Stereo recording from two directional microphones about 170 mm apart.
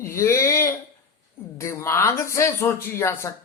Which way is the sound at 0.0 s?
15° left (ahead or behind).